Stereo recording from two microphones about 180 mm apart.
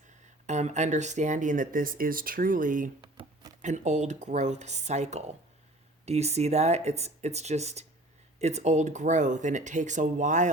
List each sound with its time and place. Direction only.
0.4 s speech: 40° right (ahead or behind)
3.0 s a sound: 30° right (ahead or behind)
3.6 s speech: 40° right (ahead or behind)